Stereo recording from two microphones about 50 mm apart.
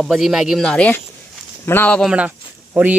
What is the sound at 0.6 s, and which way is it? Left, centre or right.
Speech, centre.